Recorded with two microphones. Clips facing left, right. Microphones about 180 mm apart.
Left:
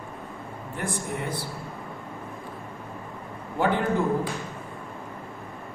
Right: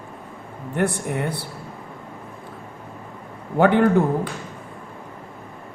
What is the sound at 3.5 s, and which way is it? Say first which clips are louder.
Speech: right 8 dB; 65° right (ahead or behind).